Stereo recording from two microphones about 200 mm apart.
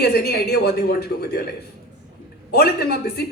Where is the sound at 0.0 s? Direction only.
55° left (ahead or behind).